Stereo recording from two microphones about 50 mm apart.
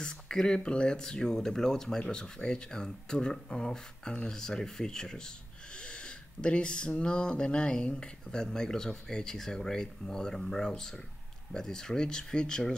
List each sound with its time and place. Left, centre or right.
0.0 s speech: centre